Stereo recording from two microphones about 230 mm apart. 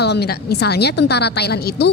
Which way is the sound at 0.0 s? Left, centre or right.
Left.